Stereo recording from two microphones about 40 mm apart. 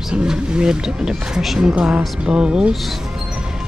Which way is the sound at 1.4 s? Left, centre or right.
Centre.